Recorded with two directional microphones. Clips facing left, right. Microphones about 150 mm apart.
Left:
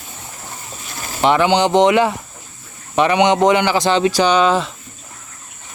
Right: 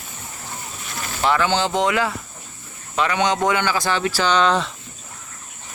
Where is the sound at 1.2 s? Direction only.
20° left (ahead or behind).